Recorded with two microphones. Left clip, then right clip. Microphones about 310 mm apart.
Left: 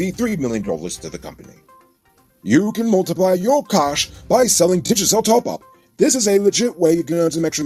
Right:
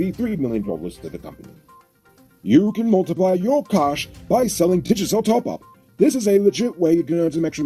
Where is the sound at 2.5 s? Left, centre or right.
Left.